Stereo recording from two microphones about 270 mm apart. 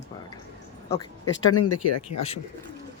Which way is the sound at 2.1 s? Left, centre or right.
Left.